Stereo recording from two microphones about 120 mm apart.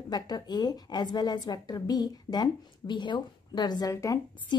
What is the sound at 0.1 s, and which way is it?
A woman's voice, 35° left (ahead or behind).